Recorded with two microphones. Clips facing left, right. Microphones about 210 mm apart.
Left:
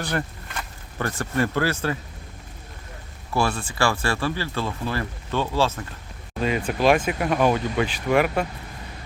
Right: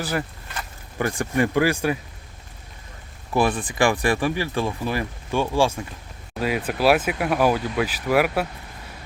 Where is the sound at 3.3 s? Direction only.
15° right (ahead or behind).